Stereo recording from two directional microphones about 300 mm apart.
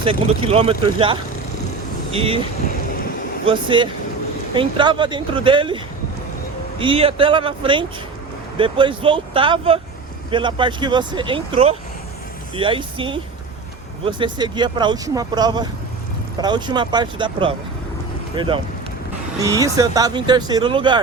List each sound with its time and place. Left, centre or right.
0.0 s speech: centre
3.4 s speech: centre